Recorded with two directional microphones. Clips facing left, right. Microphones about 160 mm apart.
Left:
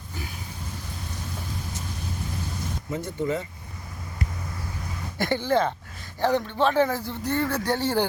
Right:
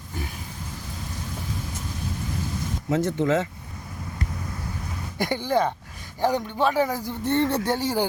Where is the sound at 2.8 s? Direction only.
90° right.